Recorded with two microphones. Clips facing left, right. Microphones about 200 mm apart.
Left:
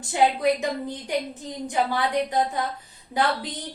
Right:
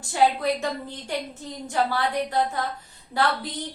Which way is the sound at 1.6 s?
15° left (ahead or behind).